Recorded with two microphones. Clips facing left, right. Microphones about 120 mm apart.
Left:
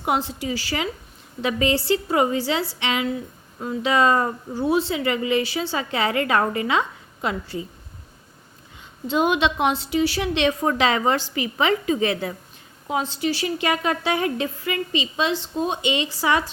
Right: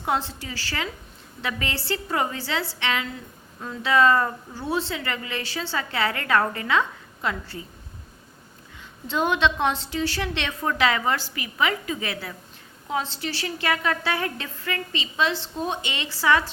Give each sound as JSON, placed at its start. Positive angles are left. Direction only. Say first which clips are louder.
{"t": 0.0, "sound": "speech", "louder": "left 3 dB", "side_deg": 15}
{"t": 9.0, "sound": "a woman's voice", "louder": "left 2 dB", "side_deg": 15}